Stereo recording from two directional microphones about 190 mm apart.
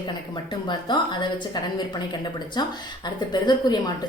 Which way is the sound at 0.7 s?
25° left (ahead or behind).